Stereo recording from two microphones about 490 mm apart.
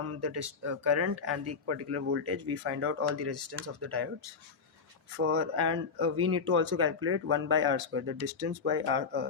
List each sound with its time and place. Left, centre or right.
0.0 s speech: right
5.2 s speech: right